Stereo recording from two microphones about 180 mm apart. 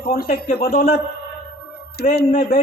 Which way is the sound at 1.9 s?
60° left (ahead or behind).